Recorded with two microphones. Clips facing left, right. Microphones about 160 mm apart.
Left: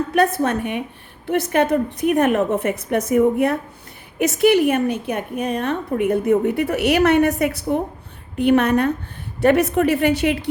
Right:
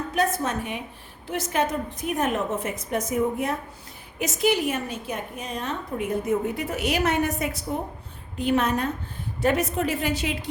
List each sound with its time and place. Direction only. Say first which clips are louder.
0.1 s a woman's voice: left 6 dB; 65° left (ahead or behind)